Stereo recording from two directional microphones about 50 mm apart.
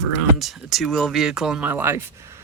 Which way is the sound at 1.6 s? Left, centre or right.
Right.